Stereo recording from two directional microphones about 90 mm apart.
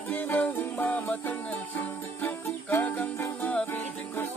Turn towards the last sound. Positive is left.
turn(degrees=20)  # may be behind; listen again after turning